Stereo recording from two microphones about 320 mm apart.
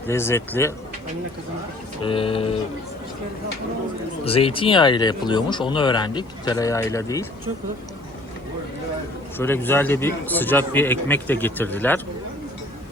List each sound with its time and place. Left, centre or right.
0.1 s speech: centre
2.0 s speech: centre
4.2 s speech: centre
9.4 s speech: centre